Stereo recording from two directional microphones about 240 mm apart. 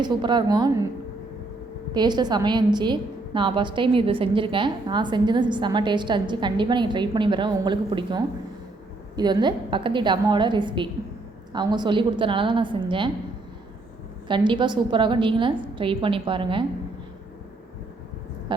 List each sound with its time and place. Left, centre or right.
0.0 s a woman's voice: centre
1.9 s a woman's voice: centre
14.3 s a woman's voice: centre